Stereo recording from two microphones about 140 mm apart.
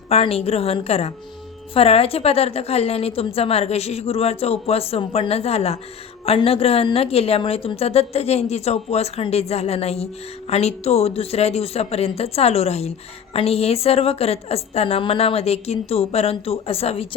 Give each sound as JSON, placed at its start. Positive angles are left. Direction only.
{"t": 0.1, "sound": "a woman's voice", "side_deg": 45}